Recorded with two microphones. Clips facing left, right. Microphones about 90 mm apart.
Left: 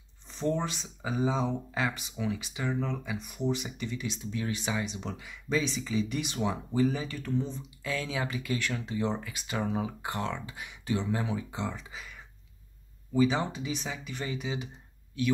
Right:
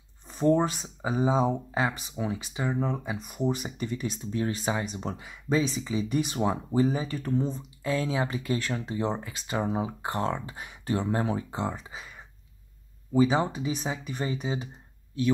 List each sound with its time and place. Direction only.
0.3 s speech: 45° right (ahead or behind)
0.8 s speech: 30° right (ahead or behind)
1.8 s speech: 30° right (ahead or behind)